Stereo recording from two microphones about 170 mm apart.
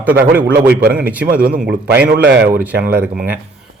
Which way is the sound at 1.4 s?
65° right (ahead or behind).